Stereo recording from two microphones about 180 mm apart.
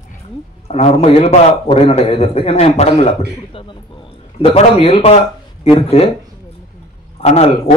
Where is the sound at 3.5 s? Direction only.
30° left (ahead or behind).